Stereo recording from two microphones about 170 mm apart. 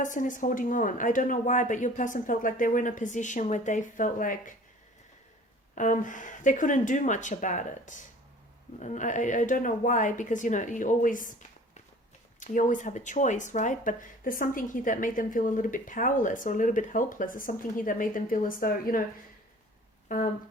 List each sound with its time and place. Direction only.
0.0 s speech: 50° left (ahead or behind)
5.7 s speech: 50° left (ahead or behind)